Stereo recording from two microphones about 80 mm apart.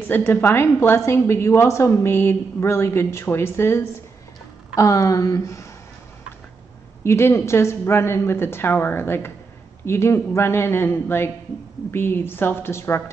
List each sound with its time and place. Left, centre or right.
0.0 s a woman's voice: left
4.7 s speech: left
7.0 s a woman's voice: left